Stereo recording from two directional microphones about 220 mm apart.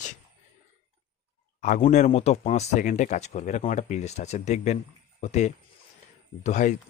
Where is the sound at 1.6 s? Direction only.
35° left (ahead or behind).